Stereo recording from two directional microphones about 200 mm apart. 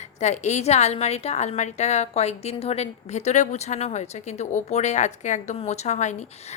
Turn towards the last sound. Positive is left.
turn(degrees=35)  # may be behind; listen again after turning